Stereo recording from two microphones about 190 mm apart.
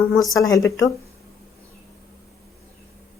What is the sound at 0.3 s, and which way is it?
Speech, 20° left (ahead or behind).